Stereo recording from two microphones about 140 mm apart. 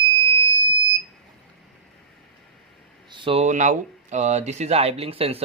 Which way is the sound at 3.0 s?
35° right (ahead or behind).